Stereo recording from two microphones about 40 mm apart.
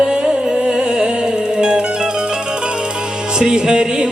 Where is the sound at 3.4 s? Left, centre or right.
Centre.